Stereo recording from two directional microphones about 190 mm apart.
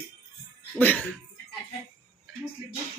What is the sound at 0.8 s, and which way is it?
Speech, 10° left (ahead or behind).